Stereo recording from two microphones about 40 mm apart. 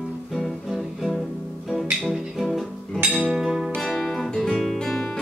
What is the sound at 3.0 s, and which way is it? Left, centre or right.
Music, centre.